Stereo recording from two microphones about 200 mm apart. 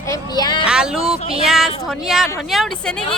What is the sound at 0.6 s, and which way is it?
Speech, 5° right (ahead or behind).